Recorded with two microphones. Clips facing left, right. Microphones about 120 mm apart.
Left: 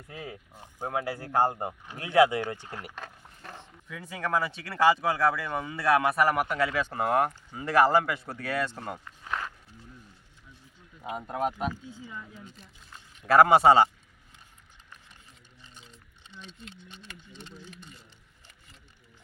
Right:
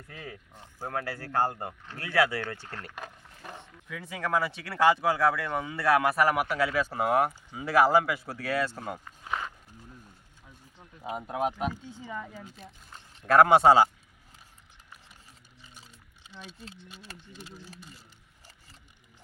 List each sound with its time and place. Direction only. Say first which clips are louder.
0.1 s speech: left 3 dB; 15° left (ahead or behind)
2.9 s vehicle: right 1 dB; 10° right (ahead or behind)
3.8 s speech: even; centre (ahead or behind)
11.2 s speech: even; 5° right (ahead or behind)
11.9 s speech: right 4 dB; 65° right (ahead or behind)
13.2 s speech: even; centre (ahead or behind)
15.9 s a sound: even; 5° right (ahead or behind)
17.3 s speech: even; 5° right (ahead or behind)